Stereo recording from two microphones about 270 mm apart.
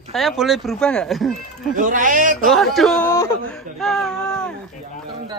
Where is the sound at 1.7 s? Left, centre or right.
Right.